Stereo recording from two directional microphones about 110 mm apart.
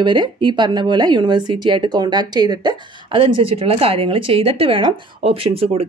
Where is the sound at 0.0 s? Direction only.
45° right (ahead or behind).